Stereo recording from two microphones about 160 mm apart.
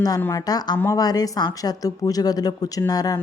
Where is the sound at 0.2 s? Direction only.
20° left (ahead or behind).